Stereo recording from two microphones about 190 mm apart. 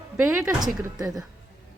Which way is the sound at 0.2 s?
10° right (ahead or behind).